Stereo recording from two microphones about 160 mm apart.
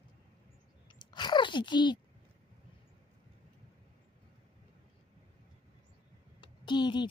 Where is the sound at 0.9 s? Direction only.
30° left (ahead or behind).